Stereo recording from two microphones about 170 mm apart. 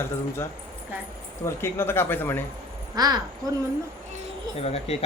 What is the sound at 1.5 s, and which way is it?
Speech, 15° left (ahead or behind).